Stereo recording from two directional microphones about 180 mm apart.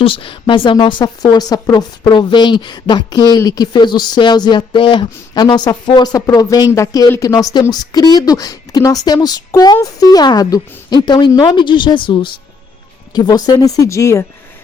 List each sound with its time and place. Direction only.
0.0 s speech: 30° left (ahead or behind)